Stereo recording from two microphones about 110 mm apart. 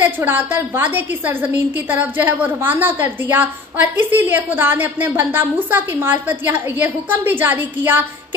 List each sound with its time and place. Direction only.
0.0 s a woman's voice: 15° right (ahead or behind)